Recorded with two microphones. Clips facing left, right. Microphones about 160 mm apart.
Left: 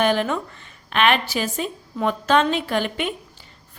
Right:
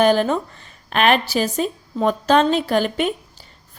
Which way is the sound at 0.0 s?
35° right (ahead or behind).